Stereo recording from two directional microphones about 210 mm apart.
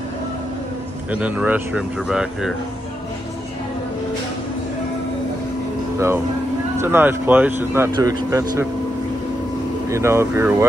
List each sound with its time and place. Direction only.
1.1 s speech: 5° right (ahead or behind)
6.8 s speech: 10° right (ahead or behind)
9.8 s speech: 10° right (ahead or behind)